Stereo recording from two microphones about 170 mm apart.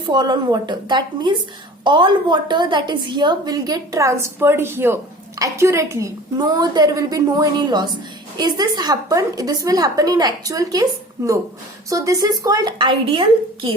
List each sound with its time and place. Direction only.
0.0 s a woman's voice: 25° right (ahead or behind)
11.9 s a woman's voice: 20° right (ahead or behind)